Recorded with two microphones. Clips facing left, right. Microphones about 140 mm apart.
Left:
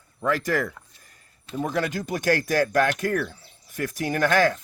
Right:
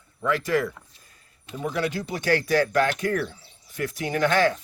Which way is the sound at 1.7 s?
45° left (ahead or behind).